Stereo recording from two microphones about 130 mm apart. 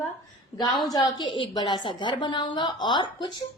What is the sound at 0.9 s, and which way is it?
A woman's voice, 30° left (ahead or behind).